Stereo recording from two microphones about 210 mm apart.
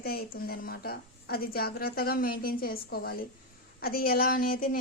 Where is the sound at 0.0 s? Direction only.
45° left (ahead or behind).